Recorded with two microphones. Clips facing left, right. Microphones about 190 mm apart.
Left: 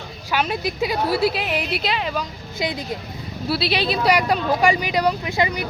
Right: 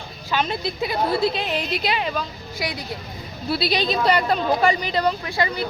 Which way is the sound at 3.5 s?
5° left (ahead or behind).